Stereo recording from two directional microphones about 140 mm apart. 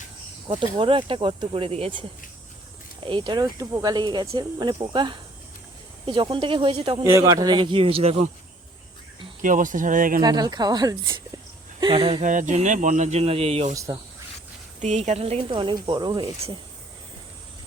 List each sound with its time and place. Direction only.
0.6 s speech: 35° right (ahead or behind)
3.1 s speech: 35° right (ahead or behind)
7.0 s speech: 20° right (ahead or behind); by 8.2 s 40° right (ahead or behind)
9.4 s speech: 70° right (ahead or behind)
10.2 s speech: 30° right (ahead or behind)
12.2 s speech: 65° right (ahead or behind); by 13.7 s 45° right (ahead or behind)
13.7 s speech: 25° right (ahead or behind)
14.8 s speech: 55° right (ahead or behind); by 16.6 s 35° right (ahead or behind)